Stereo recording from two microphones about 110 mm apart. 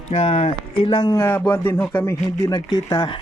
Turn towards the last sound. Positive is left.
turn(degrees=40)  # may be behind; listen again after turning